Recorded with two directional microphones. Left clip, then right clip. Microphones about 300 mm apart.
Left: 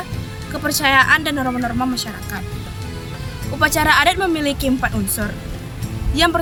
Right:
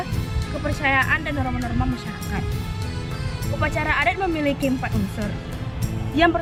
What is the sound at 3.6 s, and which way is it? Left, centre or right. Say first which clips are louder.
Speech: left 8 dB; centre.